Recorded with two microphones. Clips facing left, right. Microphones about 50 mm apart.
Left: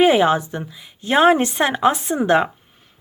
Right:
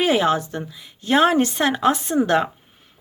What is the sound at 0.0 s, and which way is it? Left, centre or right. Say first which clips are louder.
Speech: left 4 dB; centre.